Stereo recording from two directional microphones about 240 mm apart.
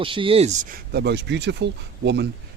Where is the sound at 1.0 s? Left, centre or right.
Right.